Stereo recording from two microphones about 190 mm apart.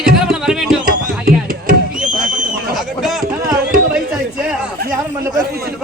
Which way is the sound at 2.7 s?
Centre (ahead or behind).